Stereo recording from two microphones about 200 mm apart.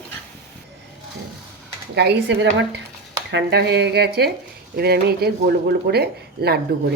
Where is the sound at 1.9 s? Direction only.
60° right (ahead or behind).